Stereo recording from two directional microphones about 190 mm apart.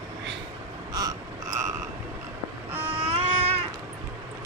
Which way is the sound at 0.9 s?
20° right (ahead or behind).